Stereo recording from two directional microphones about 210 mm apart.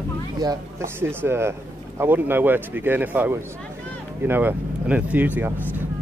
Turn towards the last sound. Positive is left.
turn(degrees=-10)  # may be behind; listen again after turning